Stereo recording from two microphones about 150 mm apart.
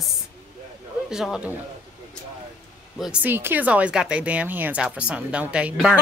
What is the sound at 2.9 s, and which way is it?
Speech, 5° right (ahead or behind).